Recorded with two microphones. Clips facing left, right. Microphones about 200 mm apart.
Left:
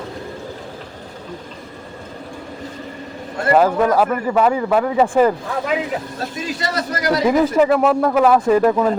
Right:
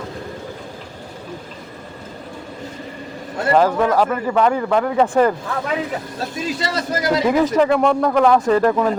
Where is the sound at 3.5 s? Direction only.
5° left (ahead or behind).